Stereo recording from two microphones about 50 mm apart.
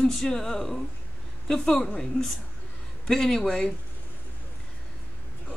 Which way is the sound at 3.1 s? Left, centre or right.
Centre.